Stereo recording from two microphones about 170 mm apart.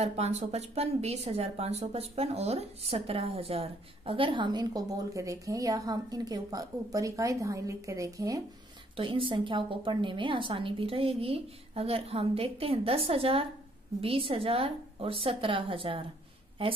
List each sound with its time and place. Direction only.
0.0 s speech: 40° right (ahead or behind); by 8.4 s 20° right (ahead or behind)
8.9 s a woman's voice: 30° right (ahead or behind)